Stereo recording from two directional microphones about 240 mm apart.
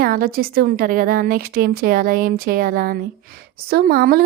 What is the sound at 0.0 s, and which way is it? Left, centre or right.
A woman's voice, right.